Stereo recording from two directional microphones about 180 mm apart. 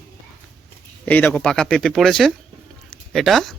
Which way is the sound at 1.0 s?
10° left (ahead or behind).